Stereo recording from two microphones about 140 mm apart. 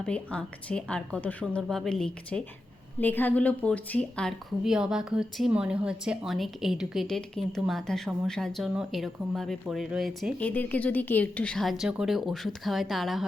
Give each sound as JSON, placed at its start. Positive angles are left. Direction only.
{"t": 0.0, "sound": "a woman's voice", "side_deg": 10}
{"t": 10.4, "sound": "a woman's voice", "side_deg": 10}